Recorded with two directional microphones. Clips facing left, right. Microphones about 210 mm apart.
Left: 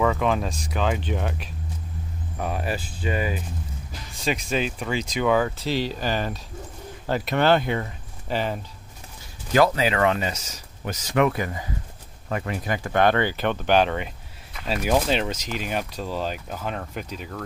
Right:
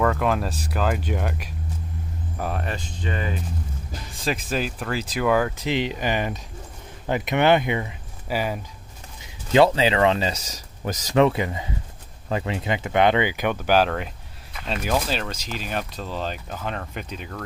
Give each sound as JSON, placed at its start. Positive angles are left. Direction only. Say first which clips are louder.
{"t": 0.0, "sound": "speech", "louder": "even", "side_deg": 0}
{"t": 4.1, "sound": "speech", "louder": "left 1 dB", "side_deg": 0}
{"t": 5.6, "sound": "speech", "louder": "right 1 dB", "side_deg": -20}
{"t": 9.2, "sound": "speech", "louder": "right 3 dB", "side_deg": -25}
{"t": 15.0, "sound": "speech", "louder": "left 3 dB", "side_deg": 20}